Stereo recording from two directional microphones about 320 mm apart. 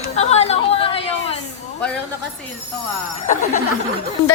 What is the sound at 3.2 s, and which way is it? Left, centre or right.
Speech, left.